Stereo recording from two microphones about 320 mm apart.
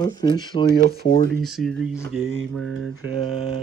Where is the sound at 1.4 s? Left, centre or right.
Centre.